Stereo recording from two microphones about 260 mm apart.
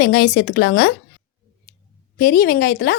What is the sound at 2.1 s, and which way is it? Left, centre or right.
Speech, left.